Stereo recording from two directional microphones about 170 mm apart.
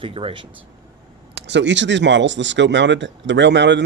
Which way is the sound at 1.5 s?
90° right.